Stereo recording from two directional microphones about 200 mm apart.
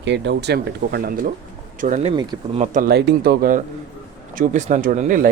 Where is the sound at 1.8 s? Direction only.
35° right (ahead or behind).